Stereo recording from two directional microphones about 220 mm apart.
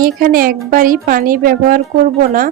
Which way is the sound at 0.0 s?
40° right (ahead or behind).